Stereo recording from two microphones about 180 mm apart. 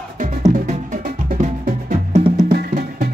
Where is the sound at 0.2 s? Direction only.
45° right (ahead or behind).